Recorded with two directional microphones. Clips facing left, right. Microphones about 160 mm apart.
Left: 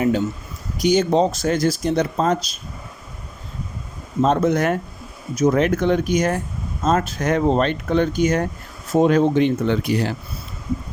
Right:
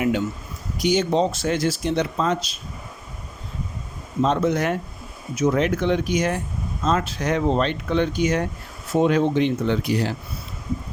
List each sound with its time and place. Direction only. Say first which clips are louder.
0.8 s speech: left 3 dB; 45° left (ahead or behind)
4.2 s speech: left 3 dB; 45° left (ahead or behind)